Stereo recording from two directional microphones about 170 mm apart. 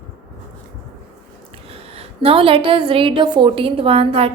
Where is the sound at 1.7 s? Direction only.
35° right (ahead or behind).